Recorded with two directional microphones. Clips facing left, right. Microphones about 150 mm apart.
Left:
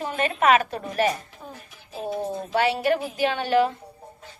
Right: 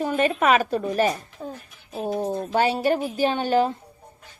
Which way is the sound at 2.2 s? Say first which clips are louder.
Right 1 dB; 35° right (ahead or behind).